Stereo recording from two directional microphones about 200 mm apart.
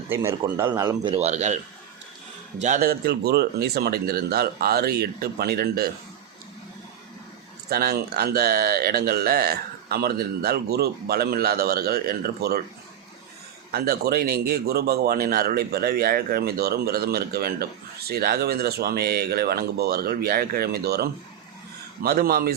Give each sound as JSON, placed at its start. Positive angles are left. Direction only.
{"t": 0.1, "sound": "a man's voice", "side_deg": -15}
{"t": 2.6, "sound": "speech", "side_deg": -40}
{"t": 7.7, "sound": "speech", "side_deg": -50}
{"t": 13.7, "sound": "speech", "side_deg": -50}